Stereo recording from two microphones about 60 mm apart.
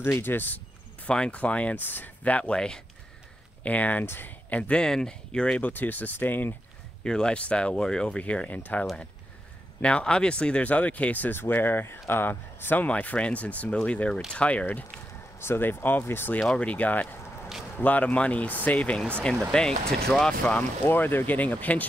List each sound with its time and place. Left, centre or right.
0.0 s speech: left
1.0 s speech: centre
3.6 s speech: left
4.0 s speech: left
4.5 s speech: left
5.6 s speech: left
7.0 s speech: centre
15.4 s speech: left
16.5 s speech: left
19.5 s speech: centre
20.8 s speech: left